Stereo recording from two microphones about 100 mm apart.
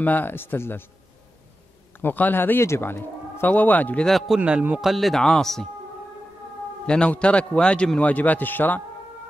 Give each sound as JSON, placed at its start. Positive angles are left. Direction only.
{"t": 0.0, "sound": "speech", "side_deg": 20}
{"t": 2.0, "sound": "speech", "side_deg": 20}
{"t": 4.4, "sound": "a man's voice", "side_deg": -15}
{"t": 4.9, "sound": "speech", "side_deg": 0}
{"t": 6.9, "sound": "a man's voice", "side_deg": 10}